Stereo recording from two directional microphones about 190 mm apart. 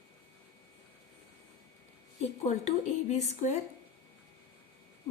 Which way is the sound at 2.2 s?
35° left (ahead or behind).